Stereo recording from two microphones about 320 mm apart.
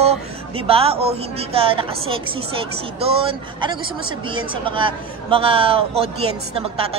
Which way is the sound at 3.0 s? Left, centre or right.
Centre.